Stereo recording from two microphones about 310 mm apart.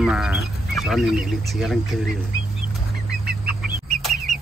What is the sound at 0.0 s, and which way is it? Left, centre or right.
Speech, centre.